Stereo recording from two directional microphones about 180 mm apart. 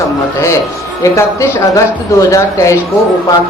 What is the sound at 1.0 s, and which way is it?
Speech, 15° left (ahead or behind).